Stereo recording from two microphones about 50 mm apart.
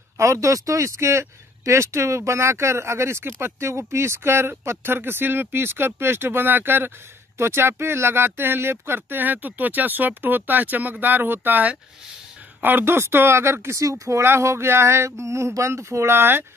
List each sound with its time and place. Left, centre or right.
0.2 s speech: right
7.3 s speech: right
12.6 s speech: right
14.2 s speech: right